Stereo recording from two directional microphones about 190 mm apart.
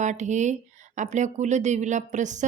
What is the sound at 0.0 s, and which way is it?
Speech, 40° right (ahead or behind).